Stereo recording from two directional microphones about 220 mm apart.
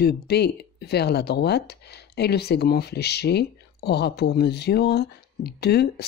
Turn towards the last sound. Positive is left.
turn(degrees=50)  # may be behind; listen again after turning